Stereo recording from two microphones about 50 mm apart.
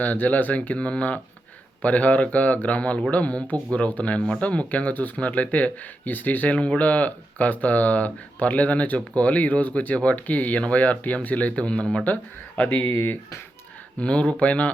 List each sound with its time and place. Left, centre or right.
0.0 s speech: left
14.0 s speech: left